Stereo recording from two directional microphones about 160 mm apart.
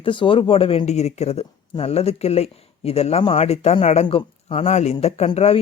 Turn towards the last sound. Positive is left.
turn(degrees=45)  # may be behind; listen again after turning